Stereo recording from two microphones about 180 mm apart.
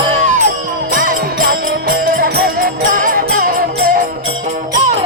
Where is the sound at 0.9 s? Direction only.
50° right (ahead or behind).